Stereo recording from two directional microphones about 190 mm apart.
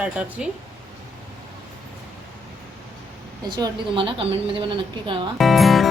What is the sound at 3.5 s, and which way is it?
A woman's voice, 25° right (ahead or behind).